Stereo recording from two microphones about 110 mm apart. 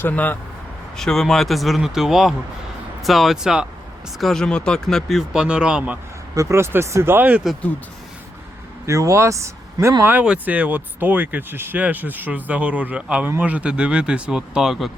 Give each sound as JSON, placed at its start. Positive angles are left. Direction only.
{"t": 0.0, "sound": "speech", "side_deg": 15}
{"t": 0.9, "sound": "speech", "side_deg": 5}
{"t": 6.3, "sound": "speech", "side_deg": -25}
{"t": 8.9, "sound": "speech", "side_deg": -30}
{"t": 10.0, "sound": "speech", "side_deg": -15}